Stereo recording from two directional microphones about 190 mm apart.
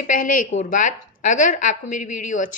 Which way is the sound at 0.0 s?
45° left (ahead or behind).